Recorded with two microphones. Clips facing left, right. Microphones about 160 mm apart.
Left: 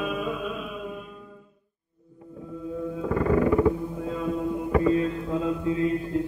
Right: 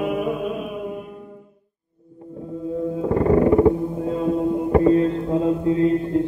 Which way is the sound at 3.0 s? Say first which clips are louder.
Right 5 dB; 35° right (ahead or behind).